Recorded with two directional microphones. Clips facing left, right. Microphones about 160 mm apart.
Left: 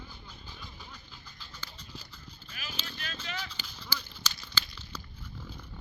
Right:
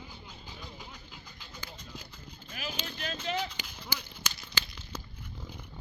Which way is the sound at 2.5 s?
50° right (ahead or behind).